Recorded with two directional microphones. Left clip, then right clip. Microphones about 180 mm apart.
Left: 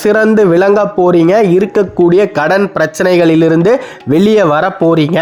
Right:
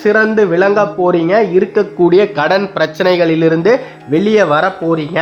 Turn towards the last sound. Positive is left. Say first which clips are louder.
# left 3 dB
turn(degrees=45)  # may be behind; listen again after turning